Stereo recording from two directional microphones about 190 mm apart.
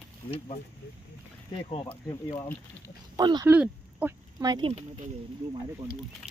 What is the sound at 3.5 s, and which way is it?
Speech, 10° right (ahead or behind).